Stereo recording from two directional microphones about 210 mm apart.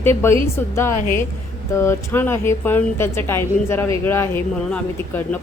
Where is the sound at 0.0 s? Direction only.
10° left (ahead or behind).